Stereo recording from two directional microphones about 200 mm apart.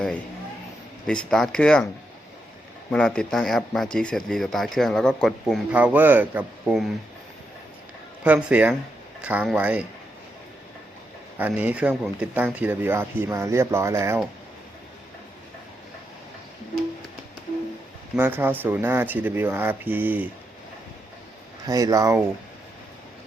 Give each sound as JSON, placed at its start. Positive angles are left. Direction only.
{"t": 1.0, "sound": "speech", "side_deg": 5}
{"t": 2.9, "sound": "speech", "side_deg": 5}
{"t": 8.2, "sound": "speech", "side_deg": -5}
{"t": 11.3, "sound": "speech", "side_deg": -10}
{"t": 18.2, "sound": "speech", "side_deg": -10}
{"t": 21.7, "sound": "speech", "side_deg": -20}